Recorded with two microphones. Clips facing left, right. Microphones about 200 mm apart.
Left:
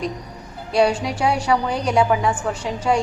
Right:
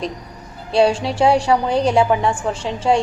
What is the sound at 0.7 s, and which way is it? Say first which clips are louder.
A woman's voice: right 2 dB; 30° right (ahead or behind).